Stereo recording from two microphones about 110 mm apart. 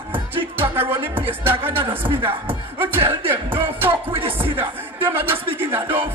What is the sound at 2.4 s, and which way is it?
Speech, 20° right (ahead or behind).